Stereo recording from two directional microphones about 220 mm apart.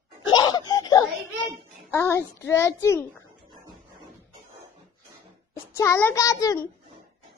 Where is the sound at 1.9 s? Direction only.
10° left (ahead or behind).